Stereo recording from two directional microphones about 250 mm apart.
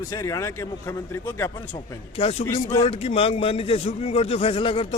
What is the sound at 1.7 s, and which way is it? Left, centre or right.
A man's voice, left.